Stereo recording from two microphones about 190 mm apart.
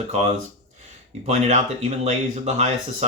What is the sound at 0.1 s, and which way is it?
Speech, 35° right (ahead or behind).